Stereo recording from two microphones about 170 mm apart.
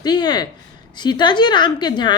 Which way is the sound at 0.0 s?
25° left (ahead or behind).